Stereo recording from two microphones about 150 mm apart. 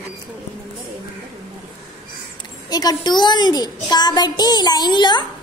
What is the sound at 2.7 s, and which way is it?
A woman's voice, 25° left (ahead or behind).